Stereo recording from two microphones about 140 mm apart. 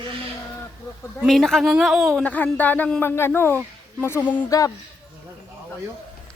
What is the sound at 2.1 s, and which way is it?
Speech, 10° left (ahead or behind).